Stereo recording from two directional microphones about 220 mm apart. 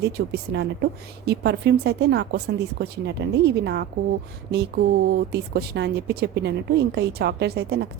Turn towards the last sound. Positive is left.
turn(degrees=-45)  # may be behind; listen again after turning